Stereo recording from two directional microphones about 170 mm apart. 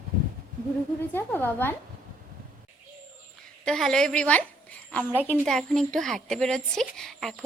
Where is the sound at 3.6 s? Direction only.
5° left (ahead or behind).